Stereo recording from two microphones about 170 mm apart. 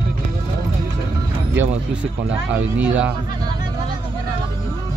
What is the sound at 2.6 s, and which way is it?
Speech, 10° right (ahead or behind).